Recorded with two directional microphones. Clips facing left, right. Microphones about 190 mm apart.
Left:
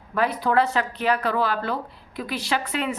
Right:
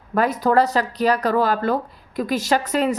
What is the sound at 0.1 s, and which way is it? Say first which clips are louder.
Speech: right 4 dB; 45° right (ahead or behind).